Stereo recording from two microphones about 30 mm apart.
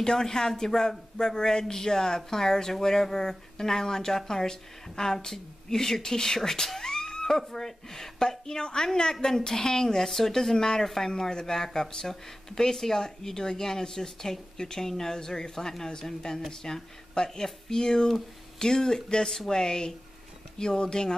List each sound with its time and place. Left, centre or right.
0.0 s speech: left